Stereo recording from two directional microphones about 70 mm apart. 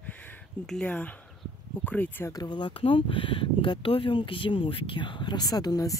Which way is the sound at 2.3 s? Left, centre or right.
Left.